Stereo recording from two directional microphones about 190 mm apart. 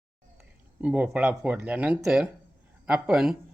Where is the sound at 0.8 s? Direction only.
5° right (ahead or behind).